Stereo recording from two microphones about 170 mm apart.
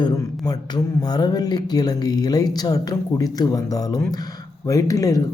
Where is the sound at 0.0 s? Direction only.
25° left (ahead or behind).